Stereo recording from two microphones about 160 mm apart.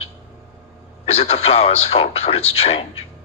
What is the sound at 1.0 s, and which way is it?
Speech, 35° left (ahead or behind).